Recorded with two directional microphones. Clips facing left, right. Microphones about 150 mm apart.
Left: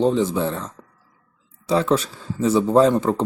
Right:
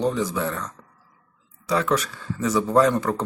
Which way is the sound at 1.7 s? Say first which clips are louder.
Left 3 dB; 30° left (ahead or behind).